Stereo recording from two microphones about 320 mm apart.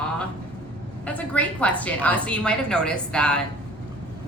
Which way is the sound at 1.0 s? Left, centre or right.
Centre.